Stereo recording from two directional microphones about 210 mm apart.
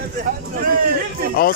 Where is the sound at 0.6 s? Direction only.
45° right (ahead or behind).